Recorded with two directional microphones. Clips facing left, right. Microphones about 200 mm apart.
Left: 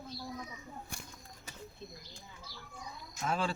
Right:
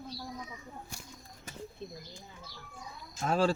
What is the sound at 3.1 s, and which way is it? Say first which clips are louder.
Speech: right 6 dB; 40° right (ahead or behind).